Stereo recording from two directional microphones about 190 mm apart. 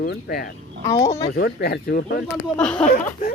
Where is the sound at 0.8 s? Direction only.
15° left (ahead or behind).